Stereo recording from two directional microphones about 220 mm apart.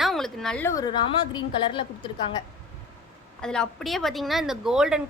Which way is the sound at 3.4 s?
5° left (ahead or behind).